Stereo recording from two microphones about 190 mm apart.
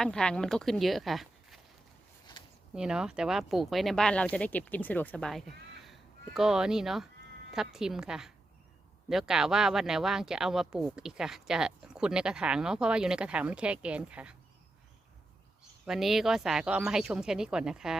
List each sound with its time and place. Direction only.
0.0 s speech: 5° left (ahead or behind)
2.7 s speech: 5° right (ahead or behind)
15.9 s speech: centre (ahead or behind)